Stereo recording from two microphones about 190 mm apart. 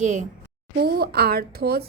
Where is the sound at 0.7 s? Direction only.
55° right (ahead or behind).